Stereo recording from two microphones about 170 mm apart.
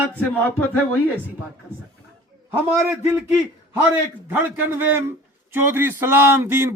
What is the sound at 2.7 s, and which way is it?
Speech, 15° right (ahead or behind).